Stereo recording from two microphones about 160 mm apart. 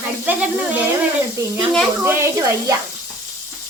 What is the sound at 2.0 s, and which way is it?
Speech, 15° right (ahead or behind).